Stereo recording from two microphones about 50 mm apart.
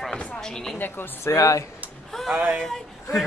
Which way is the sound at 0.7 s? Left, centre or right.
Left.